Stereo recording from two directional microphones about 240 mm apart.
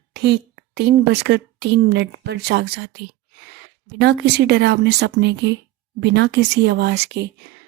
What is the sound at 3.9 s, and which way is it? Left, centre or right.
Speech, right.